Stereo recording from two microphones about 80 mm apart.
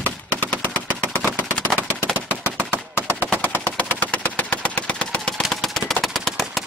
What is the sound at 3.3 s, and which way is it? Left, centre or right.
Engine, left.